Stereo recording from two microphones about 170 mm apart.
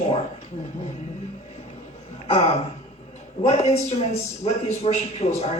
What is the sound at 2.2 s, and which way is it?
A man's voice, 35° left (ahead or behind).